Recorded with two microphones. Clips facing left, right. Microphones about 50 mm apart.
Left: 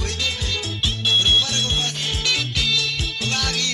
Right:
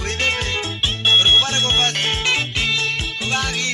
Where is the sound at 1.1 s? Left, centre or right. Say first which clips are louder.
Right 4 dB; right.